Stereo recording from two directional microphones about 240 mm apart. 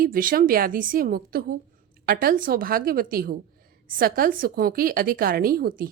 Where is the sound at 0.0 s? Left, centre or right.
Right.